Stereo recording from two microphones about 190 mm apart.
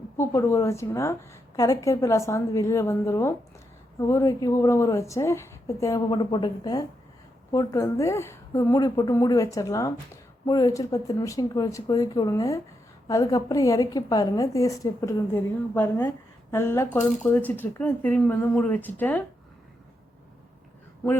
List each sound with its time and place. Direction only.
0.2 s a woman's voice: 15° left (ahead or behind)